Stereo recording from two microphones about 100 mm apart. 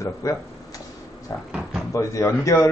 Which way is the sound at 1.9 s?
30° left (ahead or behind).